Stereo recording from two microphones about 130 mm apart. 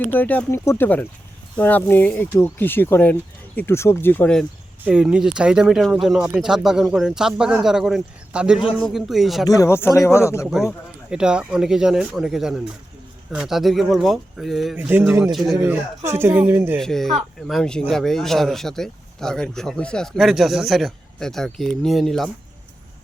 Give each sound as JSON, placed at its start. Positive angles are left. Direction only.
{"t": 0.1, "sound": "speech", "side_deg": 15}
{"t": 4.9, "sound": "speech", "side_deg": -5}
{"t": 9.5, "sound": "speech", "side_deg": 25}
{"t": 10.5, "sound": "speech", "side_deg": -5}
{"t": 14.8, "sound": "speech", "side_deg": -15}
{"t": 15.3, "sound": "speech", "side_deg": 0}
{"t": 16.0, "sound": "speech", "side_deg": -15}
{"t": 16.7, "sound": "speech", "side_deg": 5}